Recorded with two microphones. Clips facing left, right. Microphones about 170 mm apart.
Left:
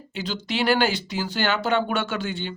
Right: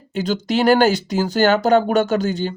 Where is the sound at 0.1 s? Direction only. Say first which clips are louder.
Right 9 dB; 45° right (ahead or behind).